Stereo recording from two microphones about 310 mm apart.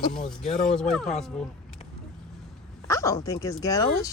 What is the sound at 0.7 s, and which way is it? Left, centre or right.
Speech, centre.